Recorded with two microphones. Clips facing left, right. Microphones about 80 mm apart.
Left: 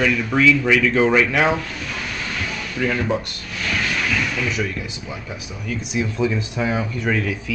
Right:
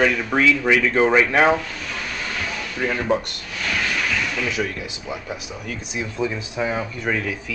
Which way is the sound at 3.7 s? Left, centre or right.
Centre.